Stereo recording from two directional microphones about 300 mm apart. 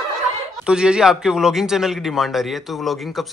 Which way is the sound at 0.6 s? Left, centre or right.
Centre.